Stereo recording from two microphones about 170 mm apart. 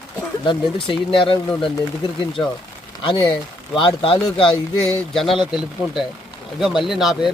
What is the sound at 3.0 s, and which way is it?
Speech, 30° left (ahead or behind).